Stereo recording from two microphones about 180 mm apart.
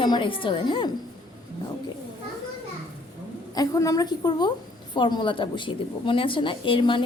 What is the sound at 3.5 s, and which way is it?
A woman's voice, 20° left (ahead or behind).